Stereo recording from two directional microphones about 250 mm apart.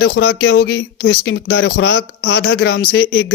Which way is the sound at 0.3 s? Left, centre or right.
Left.